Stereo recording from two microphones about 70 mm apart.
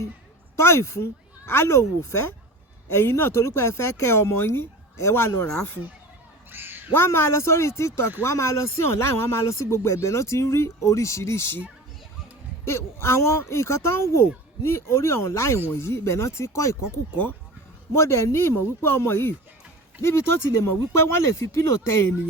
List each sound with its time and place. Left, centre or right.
0.5 s speech: left
6.5 s a sound: right
6.9 s speech: left
12.6 s speech: left
17.9 s speech: left